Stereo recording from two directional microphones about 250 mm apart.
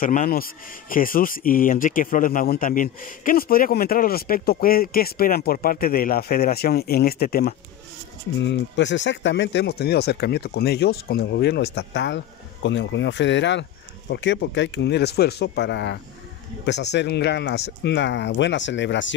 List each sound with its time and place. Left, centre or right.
0.0 s speech: left